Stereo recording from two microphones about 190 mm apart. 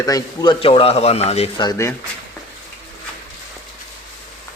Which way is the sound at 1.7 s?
15° left (ahead or behind).